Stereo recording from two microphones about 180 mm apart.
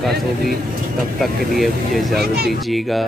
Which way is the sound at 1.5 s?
Centre (ahead or behind).